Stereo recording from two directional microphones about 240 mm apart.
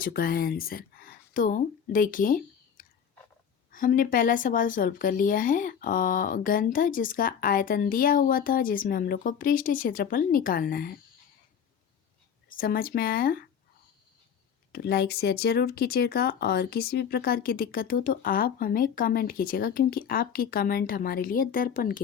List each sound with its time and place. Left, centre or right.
0.0 s speech: left
12.5 s speech: left
14.7 s speech: left